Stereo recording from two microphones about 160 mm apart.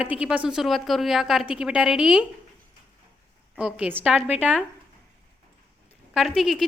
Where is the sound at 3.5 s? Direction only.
10° right (ahead or behind).